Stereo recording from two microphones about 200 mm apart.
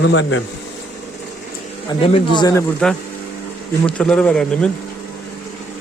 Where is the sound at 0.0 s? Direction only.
65° left (ahead or behind).